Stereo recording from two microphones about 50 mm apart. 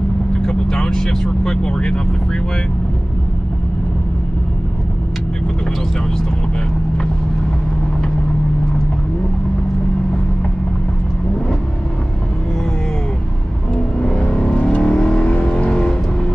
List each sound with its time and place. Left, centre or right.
0.5 s speech: centre
14.0 s vehicle: left